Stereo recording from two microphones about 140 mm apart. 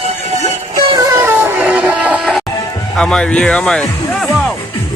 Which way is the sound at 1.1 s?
15° right (ahead or behind).